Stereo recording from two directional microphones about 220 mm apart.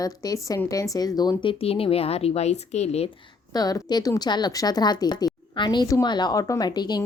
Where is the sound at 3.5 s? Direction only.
15° left (ahead or behind).